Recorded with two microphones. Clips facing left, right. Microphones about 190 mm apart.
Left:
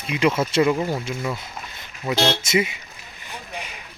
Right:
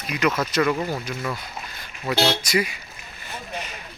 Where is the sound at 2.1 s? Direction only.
20° left (ahead or behind).